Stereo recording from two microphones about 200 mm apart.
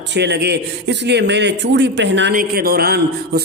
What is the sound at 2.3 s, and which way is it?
A man's voice, 45° right (ahead or behind).